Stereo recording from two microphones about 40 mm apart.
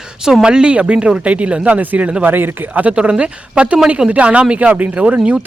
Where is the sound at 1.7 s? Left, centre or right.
Right.